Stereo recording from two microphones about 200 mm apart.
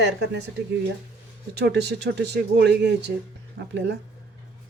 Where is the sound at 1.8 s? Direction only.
55° right (ahead or behind).